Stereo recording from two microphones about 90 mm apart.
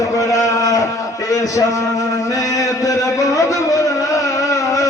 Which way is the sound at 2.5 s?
40° left (ahead or behind).